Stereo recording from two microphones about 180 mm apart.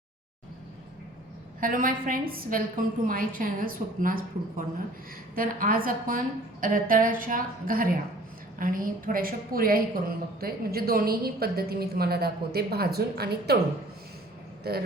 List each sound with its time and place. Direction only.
1.6 s a woman's voice: 50° right (ahead or behind)
14.6 s a man's voice: 60° right (ahead or behind)